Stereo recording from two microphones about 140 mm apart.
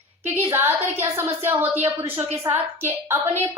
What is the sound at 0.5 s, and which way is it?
A woman's voice, 15° right (ahead or behind).